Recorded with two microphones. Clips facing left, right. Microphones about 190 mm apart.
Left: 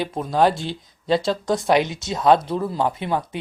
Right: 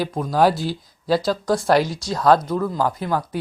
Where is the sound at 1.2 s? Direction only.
25° left (ahead or behind).